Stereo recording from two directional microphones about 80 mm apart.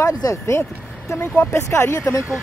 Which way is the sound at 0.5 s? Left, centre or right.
Left.